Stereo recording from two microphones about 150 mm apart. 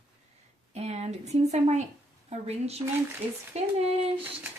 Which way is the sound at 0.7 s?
45° right (ahead or behind).